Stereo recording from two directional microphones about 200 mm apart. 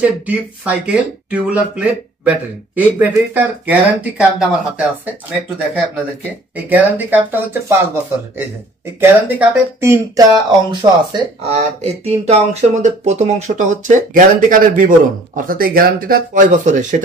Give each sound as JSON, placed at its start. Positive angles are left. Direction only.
{"t": 0.0, "sound": "speech", "side_deg": -5}
{"t": 6.5, "sound": "speech", "side_deg": -10}
{"t": 11.5, "sound": "speech", "side_deg": -30}